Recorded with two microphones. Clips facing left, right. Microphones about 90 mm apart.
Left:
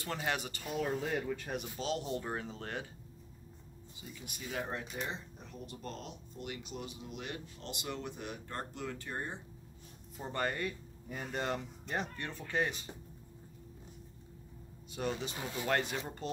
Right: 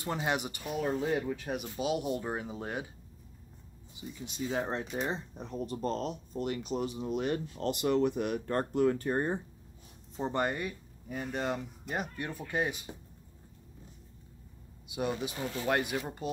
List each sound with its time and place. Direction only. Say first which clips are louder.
0.0 s speech: right 4 dB; 20° right (ahead or behind)
4.1 s speech: right 8 dB; 25° right (ahead or behind); by 9.4 s 45° right (ahead or behind)
10.1 s speech: right 5 dB; 20° right (ahead or behind)
14.9 s speech: right 4 dB; 15° right (ahead or behind)